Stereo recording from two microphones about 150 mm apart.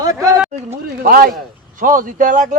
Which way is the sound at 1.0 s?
70° right (ahead or behind).